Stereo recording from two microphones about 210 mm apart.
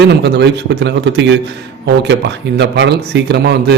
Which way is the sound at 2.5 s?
55° right (ahead or behind).